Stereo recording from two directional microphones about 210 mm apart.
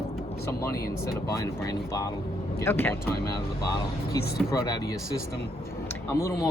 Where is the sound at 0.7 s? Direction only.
45° left (ahead or behind).